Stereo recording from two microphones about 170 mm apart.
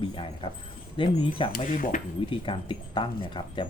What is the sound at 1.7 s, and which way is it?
Speech, 50° left (ahead or behind).